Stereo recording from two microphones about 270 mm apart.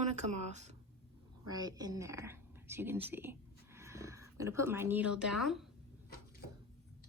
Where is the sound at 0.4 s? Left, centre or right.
Right.